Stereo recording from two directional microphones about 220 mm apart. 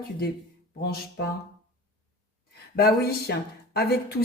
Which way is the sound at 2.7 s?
45° left (ahead or behind).